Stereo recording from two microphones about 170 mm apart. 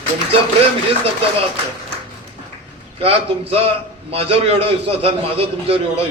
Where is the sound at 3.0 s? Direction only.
35° right (ahead or behind).